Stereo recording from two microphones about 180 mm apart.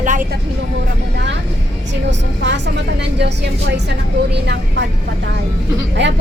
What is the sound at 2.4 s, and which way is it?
A woman's voice, 75° right (ahead or behind).